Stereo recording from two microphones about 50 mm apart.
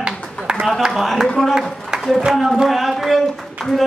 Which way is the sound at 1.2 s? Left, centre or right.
Centre.